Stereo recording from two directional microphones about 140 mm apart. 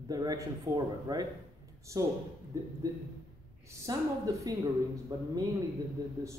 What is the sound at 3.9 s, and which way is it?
A man's voice, 25° right (ahead or behind).